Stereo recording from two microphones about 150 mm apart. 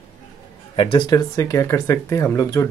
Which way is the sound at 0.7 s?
35° left (ahead or behind).